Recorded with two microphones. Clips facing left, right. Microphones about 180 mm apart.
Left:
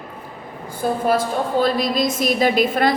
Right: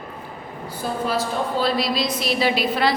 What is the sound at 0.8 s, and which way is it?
A woman's voice, 50° left (ahead or behind).